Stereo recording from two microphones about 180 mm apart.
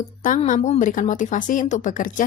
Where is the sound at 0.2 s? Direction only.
45° left (ahead or behind).